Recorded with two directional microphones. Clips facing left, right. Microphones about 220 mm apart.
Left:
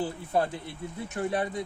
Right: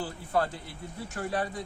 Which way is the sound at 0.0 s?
20° left (ahead or behind).